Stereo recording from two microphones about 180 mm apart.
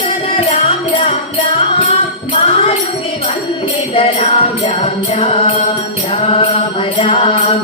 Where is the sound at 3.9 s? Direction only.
30° left (ahead or behind).